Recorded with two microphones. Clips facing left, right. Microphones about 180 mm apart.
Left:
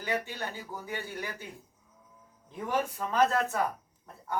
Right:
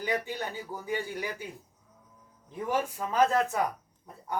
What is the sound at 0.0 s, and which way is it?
Speech, 15° right (ahead or behind).